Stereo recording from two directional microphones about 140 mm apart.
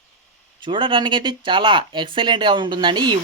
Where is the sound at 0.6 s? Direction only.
35° right (ahead or behind).